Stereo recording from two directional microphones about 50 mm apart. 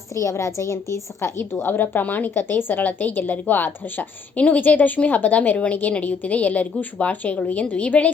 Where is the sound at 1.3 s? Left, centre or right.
Left.